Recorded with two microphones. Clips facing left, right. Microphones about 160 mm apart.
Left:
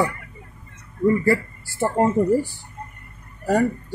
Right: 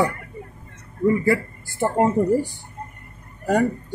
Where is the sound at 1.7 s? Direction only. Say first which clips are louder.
Even; 10° right (ahead or behind).